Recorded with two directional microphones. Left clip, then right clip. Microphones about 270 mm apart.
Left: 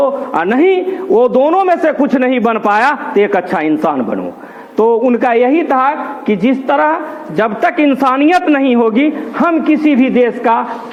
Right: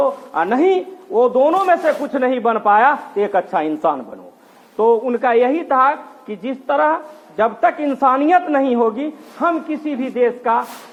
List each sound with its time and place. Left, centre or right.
0.0 s a woman's voice: left